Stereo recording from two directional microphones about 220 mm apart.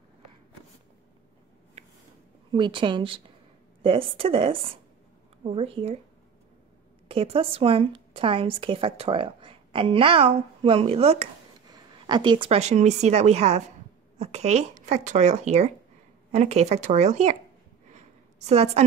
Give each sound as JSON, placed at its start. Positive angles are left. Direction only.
{"t": 2.5, "sound": "a woman's voice", "side_deg": -20}
{"t": 7.1, "sound": "a woman's voice", "side_deg": -25}
{"t": 18.4, "sound": "a woman's voice", "side_deg": -30}